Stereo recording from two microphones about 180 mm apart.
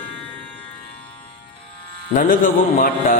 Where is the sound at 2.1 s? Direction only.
50° left (ahead or behind).